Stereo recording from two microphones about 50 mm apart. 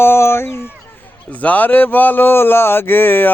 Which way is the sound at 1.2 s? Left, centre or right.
Left.